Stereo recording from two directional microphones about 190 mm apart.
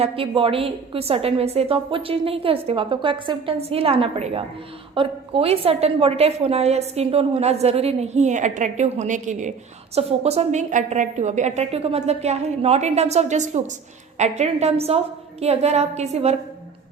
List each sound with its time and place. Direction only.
0.0 s a woman's voice: 30° right (ahead or behind)